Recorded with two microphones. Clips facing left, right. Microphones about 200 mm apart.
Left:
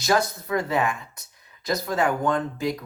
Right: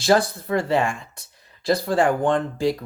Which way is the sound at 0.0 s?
30° right (ahead or behind).